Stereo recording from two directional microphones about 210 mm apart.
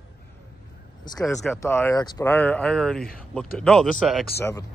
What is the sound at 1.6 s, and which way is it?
Speech, 10° left (ahead or behind).